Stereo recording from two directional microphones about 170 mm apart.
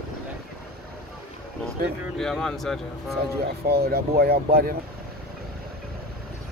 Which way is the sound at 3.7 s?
65° right (ahead or behind).